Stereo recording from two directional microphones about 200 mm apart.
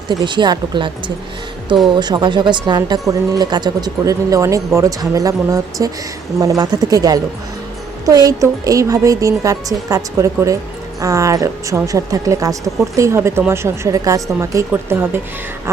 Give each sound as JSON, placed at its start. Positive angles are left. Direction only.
{"t": 0.1, "sound": "speech", "side_deg": -20}